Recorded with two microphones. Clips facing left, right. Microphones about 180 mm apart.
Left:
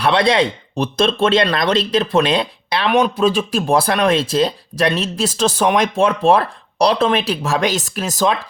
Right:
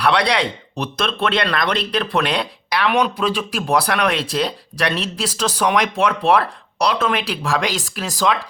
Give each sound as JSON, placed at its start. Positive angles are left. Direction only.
{"t": 0.0, "sound": "speech", "side_deg": 25}